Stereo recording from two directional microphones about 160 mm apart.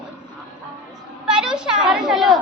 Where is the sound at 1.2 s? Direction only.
5° right (ahead or behind).